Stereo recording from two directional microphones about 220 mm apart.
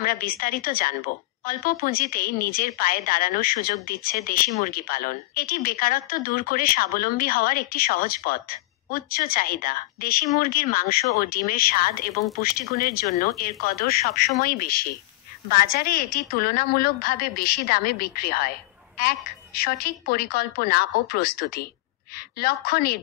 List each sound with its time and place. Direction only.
0.0 s a woman's voice: 40° left (ahead or behind)